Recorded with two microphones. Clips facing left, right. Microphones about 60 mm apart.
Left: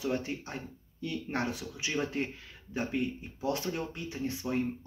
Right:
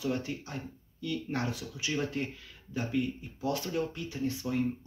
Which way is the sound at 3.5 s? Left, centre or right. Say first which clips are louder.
Right 1 dB; left.